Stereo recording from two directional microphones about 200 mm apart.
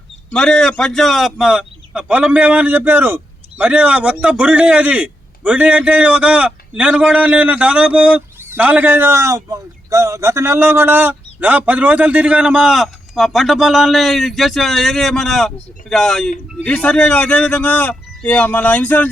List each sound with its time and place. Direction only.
0.3 s a man's voice: 5° left (ahead or behind)